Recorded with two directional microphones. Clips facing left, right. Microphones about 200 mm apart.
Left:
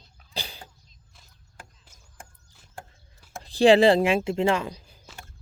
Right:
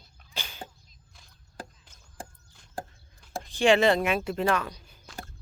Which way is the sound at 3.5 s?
35° left (ahead or behind).